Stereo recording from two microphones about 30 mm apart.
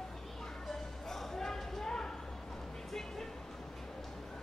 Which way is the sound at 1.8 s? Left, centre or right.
Centre.